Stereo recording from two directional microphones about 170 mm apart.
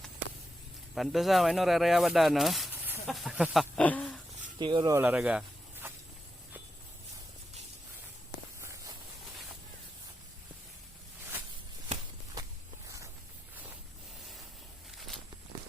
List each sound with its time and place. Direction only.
0.9 s speech: centre (ahead or behind)
2.7 s snake: 10° right (ahead or behind)
3.1 s speech: centre (ahead or behind)
4.6 s speech: 30° right (ahead or behind)
4.9 s a sound: 10° right (ahead or behind)
8.6 s walk: 20° right (ahead or behind)
11.9 s walk: 40° right (ahead or behind)